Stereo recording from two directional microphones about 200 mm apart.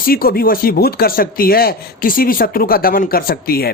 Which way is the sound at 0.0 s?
45° left (ahead or behind).